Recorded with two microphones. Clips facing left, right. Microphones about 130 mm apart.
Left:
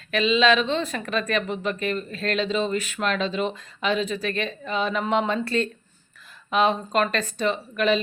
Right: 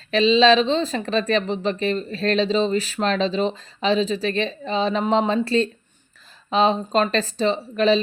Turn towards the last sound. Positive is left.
turn(degrees=-30)  # may be behind; listen again after turning